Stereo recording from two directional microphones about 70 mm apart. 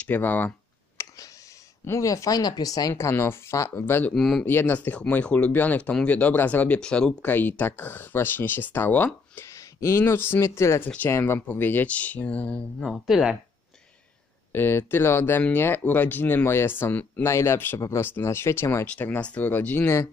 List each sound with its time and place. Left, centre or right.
0.0 s speech: left
1.0 s clicking: left
1.9 s speech: left
2.9 s speech: left
3.8 s speech: left
4.1 s speech: centre
4.5 s speech: left
4.7 s speech: centre
6.8 s speech: centre
7.2 s speech: left
9.5 s speech: left; by 12.6 s centre
12.8 s speech: centre
14.5 s speech: left
18.9 s speech: centre